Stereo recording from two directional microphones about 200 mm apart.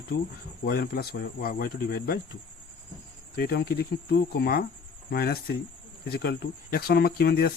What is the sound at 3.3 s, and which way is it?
Speech, 50° left (ahead or behind).